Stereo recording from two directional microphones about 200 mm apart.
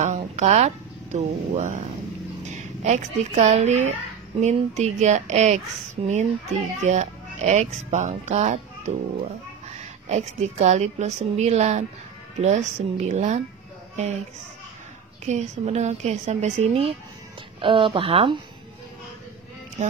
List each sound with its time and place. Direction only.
0.0 s speech: 35° right (ahead or behind)
6.8 s speech: 35° right (ahead or behind)
15.2 s speech: 35° right (ahead or behind)
19.8 s speech: 30° right (ahead or behind)